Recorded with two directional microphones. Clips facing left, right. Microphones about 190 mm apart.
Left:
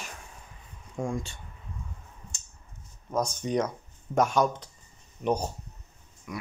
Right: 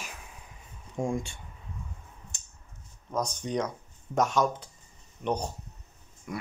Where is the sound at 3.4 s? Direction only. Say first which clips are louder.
Left 3 dB; 10° left (ahead or behind).